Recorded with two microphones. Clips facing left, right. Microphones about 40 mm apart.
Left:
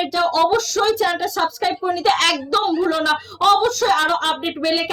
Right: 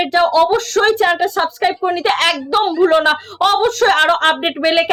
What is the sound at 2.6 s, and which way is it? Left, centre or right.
A woman's voice, right.